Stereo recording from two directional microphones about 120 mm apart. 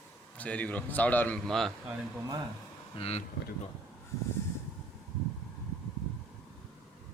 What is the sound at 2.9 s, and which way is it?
Speech, 55° left (ahead or behind).